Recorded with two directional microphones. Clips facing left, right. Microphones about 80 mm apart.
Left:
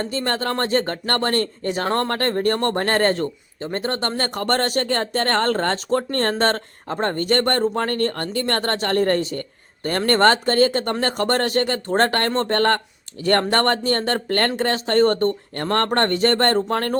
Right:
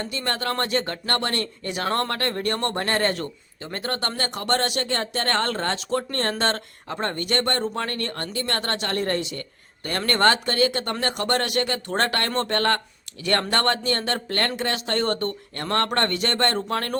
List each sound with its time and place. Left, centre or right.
0.0 s speech: left
4.2 s speech: left